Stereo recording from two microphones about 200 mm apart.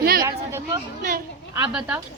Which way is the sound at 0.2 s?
20° right (ahead or behind).